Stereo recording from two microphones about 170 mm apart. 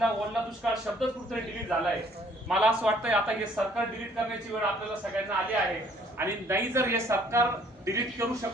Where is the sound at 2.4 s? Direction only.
5° right (ahead or behind).